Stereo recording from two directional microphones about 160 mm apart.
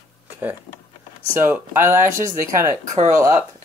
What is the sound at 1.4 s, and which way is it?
Speech, 15° right (ahead or behind).